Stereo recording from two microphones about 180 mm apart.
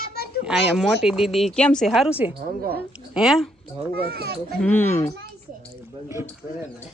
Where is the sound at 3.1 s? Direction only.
Centre (ahead or behind).